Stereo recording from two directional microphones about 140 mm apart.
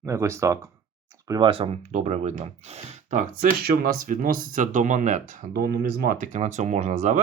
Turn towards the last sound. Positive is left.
turn(degrees=-60)  # may be behind; listen again after turning